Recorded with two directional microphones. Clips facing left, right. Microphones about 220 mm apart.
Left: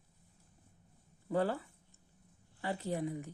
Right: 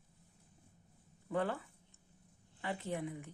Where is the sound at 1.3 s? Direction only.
35° left (ahead or behind).